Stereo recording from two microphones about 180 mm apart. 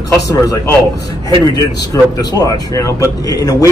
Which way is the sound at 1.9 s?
20° left (ahead or behind).